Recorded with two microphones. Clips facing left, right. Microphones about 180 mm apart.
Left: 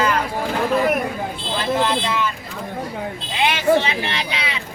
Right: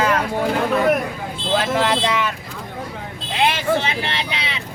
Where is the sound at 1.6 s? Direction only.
85° right.